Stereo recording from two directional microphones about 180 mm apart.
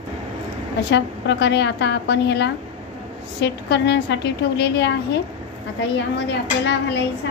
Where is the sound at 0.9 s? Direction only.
75° left (ahead or behind).